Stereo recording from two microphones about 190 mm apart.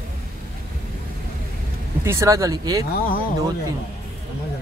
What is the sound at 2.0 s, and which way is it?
Speech, 15° right (ahead or behind).